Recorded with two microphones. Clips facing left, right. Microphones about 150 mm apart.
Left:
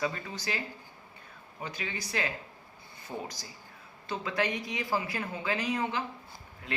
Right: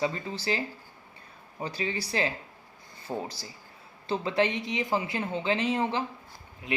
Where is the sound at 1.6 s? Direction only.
35° right (ahead or behind).